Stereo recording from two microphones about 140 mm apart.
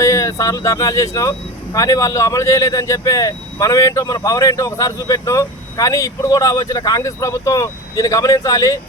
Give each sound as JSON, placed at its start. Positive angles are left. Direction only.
{"t": 0.0, "sound": "speech", "side_deg": 20}